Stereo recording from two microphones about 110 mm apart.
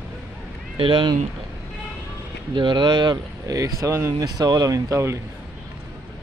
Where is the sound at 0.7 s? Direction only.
50° right (ahead or behind).